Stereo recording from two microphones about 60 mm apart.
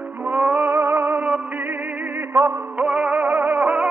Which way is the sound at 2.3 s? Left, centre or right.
Right.